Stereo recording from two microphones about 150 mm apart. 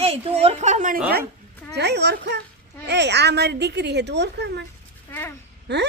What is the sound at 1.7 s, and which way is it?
Speech, 90° right.